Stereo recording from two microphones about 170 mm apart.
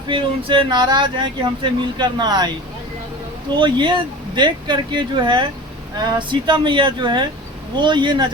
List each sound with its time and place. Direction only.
0.1 s speech: 30° right (ahead or behind)
3.5 s speech: 30° right (ahead or behind)